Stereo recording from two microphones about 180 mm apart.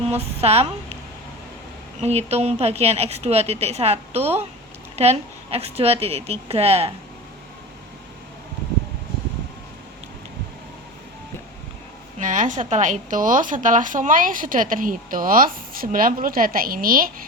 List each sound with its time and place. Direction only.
0.1 s a woman's voice: 35° right (ahead or behind)
2.0 s a woman's voice: 35° right (ahead or behind)
12.2 s a woman's voice: 45° right (ahead or behind)